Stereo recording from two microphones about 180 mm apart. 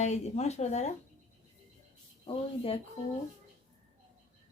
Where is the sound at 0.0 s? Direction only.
40° left (ahead or behind).